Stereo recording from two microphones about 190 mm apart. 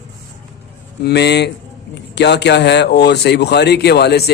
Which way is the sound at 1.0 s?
60° left (ahead or behind).